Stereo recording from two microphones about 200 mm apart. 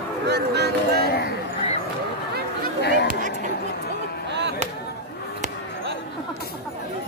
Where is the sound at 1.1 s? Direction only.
50° left (ahead or behind).